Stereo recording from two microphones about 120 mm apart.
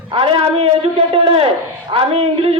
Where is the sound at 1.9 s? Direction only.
55° right (ahead or behind).